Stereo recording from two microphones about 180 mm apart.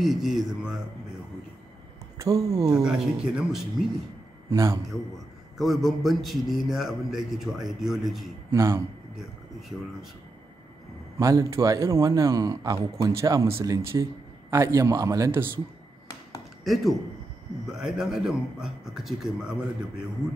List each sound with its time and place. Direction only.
0.0 s a man's voice: centre (ahead or behind)
2.2 s speech: 20° right (ahead or behind)
2.8 s a man's voice: 5° right (ahead or behind)
4.5 s a man's voice: 20° right (ahead or behind)
5.6 s a man's voice: centre (ahead or behind)
8.5 s a man's voice: 15° right (ahead or behind)
11.1 s a man's voice: 20° right (ahead or behind)
16.6 s a man's voice: centre (ahead or behind)